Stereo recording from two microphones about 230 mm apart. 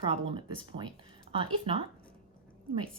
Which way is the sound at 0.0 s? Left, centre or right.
Right.